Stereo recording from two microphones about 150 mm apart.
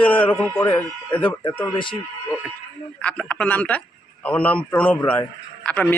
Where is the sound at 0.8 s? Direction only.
10° left (ahead or behind).